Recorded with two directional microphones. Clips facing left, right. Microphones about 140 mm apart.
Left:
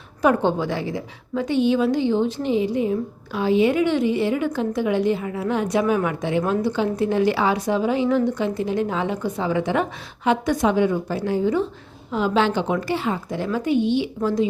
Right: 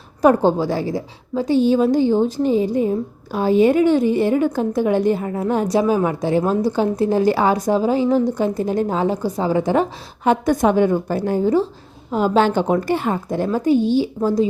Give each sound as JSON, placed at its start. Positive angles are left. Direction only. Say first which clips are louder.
{"t": 0.2, "sound": "a woman's voice", "louder": "right 4 dB", "side_deg": -40}
{"t": 5.8, "sound": "a woman's voice", "louder": "right 3 dB", "side_deg": -30}
{"t": 10.2, "sound": "a woman's voice", "louder": "right 4 dB", "side_deg": -50}